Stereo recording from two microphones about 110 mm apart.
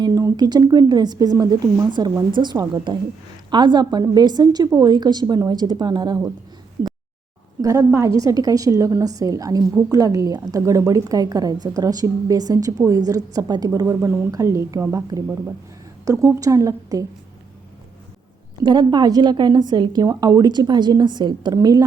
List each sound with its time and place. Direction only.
0.0 s a woman's voice: 30° right (ahead or behind)
7.6 s a woman's voice: 30° right (ahead or behind)
18.6 s a woman's voice: 40° right (ahead or behind)